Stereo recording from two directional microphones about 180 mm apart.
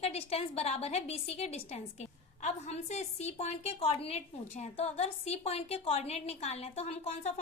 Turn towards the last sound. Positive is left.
turn(degrees=35)  # may be behind; listen again after turning